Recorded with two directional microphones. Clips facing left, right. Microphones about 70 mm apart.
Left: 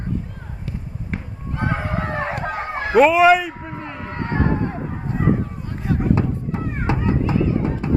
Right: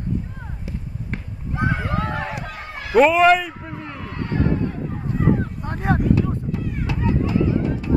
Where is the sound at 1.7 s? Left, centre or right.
Left.